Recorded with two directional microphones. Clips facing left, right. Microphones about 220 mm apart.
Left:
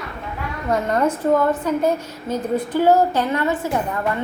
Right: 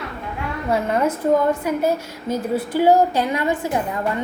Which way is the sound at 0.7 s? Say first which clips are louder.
Left 1 dB; 10° right (ahead or behind).